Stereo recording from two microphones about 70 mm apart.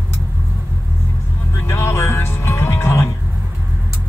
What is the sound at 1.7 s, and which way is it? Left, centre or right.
Music, left.